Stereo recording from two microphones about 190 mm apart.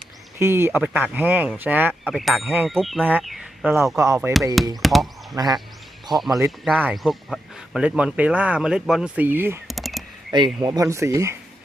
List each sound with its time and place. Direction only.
0.3 s speech: 10° right (ahead or behind)
1.9 s speech: centre (ahead or behind)
3.9 s speech: 15° right (ahead or behind)
4.8 s speech: centre (ahead or behind)
9.6 s a sound: centre (ahead or behind)
10.3 s speech: 20° right (ahead or behind)